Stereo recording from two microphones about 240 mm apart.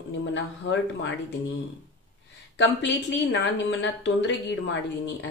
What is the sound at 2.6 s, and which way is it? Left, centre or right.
A woman's voice, left.